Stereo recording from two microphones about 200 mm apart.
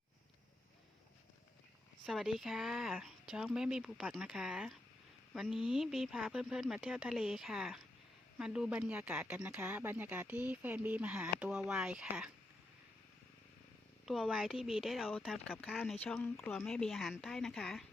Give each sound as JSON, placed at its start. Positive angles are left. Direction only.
{"t": 2.0, "sound": "speech", "side_deg": 0}
{"t": 14.0, "sound": "speech", "side_deg": 0}